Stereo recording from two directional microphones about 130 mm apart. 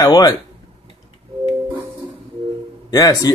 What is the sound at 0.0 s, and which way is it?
Speech, 30° left (ahead or behind).